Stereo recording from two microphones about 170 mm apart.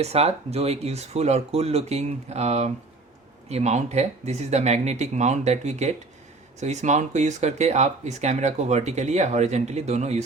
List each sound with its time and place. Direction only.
0.0 s speech: 35° right (ahead or behind)